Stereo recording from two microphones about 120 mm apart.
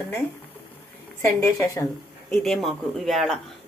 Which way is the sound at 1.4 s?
25° left (ahead or behind).